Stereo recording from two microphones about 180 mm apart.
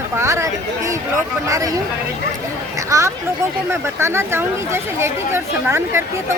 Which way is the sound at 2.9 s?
15° right (ahead or behind).